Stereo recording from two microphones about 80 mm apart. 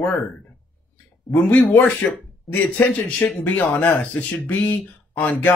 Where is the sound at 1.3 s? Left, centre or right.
Left.